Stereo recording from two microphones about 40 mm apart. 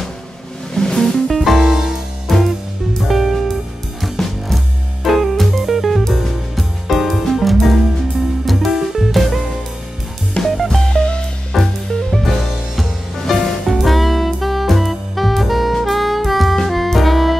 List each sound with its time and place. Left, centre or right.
0.7 s music: centre
1.3 s music: centre
2.3 s music: centre
10.4 s music: centre
10.9 s music: left
11.5 s music: centre
13.7 s saxophone: centre
16.6 s music: centre